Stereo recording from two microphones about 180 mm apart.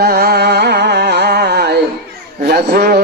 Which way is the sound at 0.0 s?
60° right (ahead or behind).